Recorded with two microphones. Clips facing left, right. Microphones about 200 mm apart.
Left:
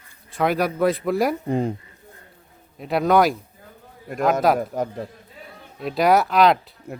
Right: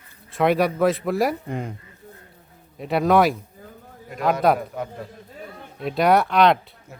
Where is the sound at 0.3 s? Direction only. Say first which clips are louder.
Right 2 dB; centre (ahead or behind).